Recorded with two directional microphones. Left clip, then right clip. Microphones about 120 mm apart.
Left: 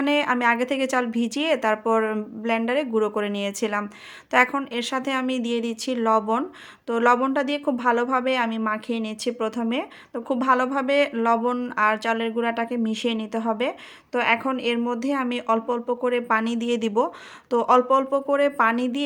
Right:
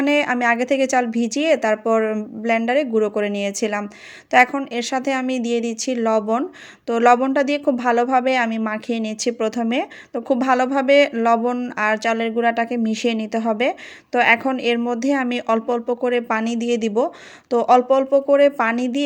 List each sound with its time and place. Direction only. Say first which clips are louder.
0.0 s a woman's voice: right 3 dB; 20° right (ahead or behind)
6.8 s a woman's voice: right 5 dB; 30° right (ahead or behind)